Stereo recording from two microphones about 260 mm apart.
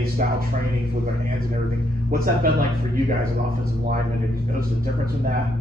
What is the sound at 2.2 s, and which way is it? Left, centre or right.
Speech, right.